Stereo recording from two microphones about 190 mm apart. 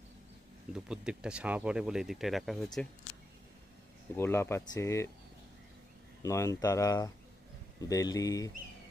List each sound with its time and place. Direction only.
0.7 s speech: 5° right (ahead or behind)
4.2 s speech: 15° left (ahead or behind)
6.2 s speech: 15° left (ahead or behind)